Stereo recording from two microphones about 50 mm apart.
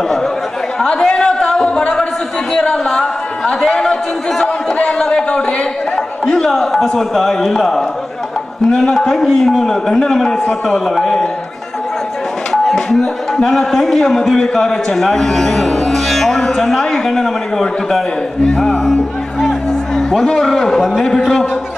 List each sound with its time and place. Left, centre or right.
0.7 s a sound: centre
2.7 s speech: centre
6.5 s a man's voice: centre
12.6 s a man's voice: centre
20.0 s music: centre
20.2 s a man's voice: centre